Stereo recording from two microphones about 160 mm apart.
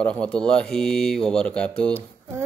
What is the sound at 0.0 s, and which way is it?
Speech, 5° left (ahead or behind).